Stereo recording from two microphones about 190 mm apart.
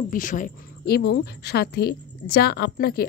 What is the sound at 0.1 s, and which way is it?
A woman's voice, 45° left (ahead or behind).